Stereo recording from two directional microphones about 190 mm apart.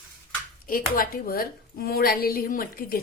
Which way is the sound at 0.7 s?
50° left (ahead or behind).